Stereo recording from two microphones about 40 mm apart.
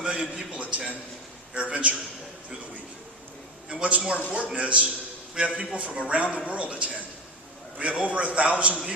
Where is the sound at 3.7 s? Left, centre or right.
Right.